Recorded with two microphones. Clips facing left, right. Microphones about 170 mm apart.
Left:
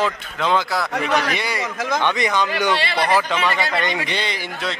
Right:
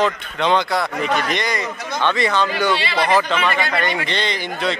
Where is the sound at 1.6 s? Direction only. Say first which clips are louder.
Left 3 dB; 90° left.